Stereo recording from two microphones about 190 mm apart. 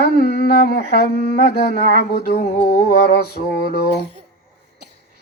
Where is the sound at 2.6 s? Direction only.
55° left (ahead or behind).